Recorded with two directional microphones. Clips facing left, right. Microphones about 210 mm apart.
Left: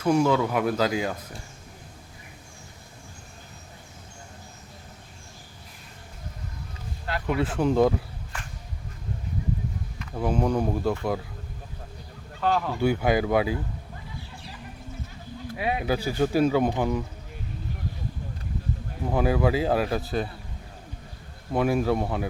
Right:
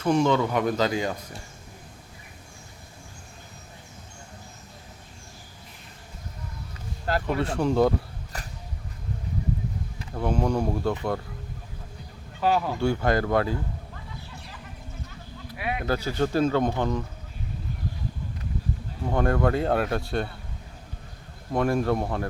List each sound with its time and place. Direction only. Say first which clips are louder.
0.0 s speech: even; 10° left (ahead or behind)
7.3 s speech: left 3 dB; 5° left (ahead or behind)
8.3 s a sound: right 1 dB; 40° right (ahead or behind)
10.2 s speech: left 1 dB; 5° left (ahead or behind)
12.4 s speech: right 1 dB; 5° right (ahead or behind)
12.8 s speech: left 4 dB; 5° left (ahead or behind)
15.5 s a sound: left 3 dB; 25° left (ahead or behind)
15.8 s speech: right 1 dB; 10° left (ahead or behind)
19.1 s speech: even; 5° left (ahead or behind)
21.5 s speech: even; 5° left (ahead or behind)